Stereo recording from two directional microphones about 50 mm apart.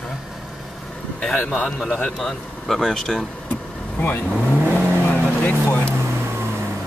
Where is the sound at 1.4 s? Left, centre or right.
Centre.